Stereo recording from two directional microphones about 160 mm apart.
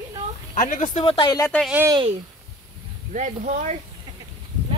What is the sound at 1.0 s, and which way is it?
Speech, 30° left (ahead or behind).